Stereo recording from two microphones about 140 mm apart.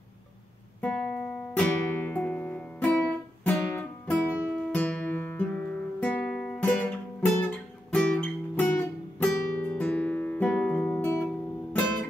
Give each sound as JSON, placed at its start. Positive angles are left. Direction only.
{"t": 0.7, "sound": "music", "side_deg": 10}